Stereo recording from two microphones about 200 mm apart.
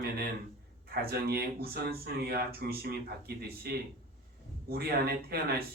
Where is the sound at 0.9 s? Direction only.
50° right (ahead or behind).